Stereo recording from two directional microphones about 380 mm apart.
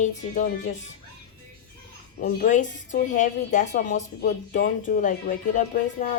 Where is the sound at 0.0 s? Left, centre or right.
Centre.